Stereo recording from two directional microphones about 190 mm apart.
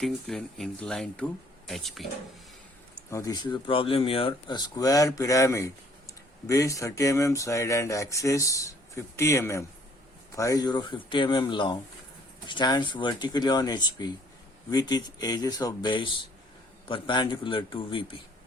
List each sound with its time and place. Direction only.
0.0 s speech: centre (ahead or behind)
3.1 s speech: 15° left (ahead or behind)